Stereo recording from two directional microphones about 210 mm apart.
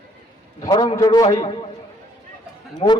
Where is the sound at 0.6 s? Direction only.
20° left (ahead or behind).